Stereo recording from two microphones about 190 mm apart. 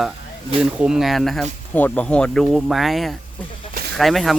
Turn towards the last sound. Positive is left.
turn(degrees=0)  # may be behind; listen again after turning